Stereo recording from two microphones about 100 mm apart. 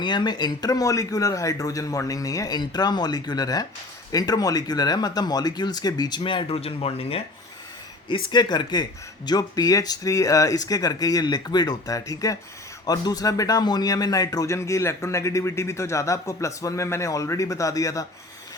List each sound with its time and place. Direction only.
0.0 s speech: 50° left (ahead or behind); by 7.2 s 75° left (ahead or behind)
8.0 s speech: 50° left (ahead or behind); by 18.0 s 35° left (ahead or behind)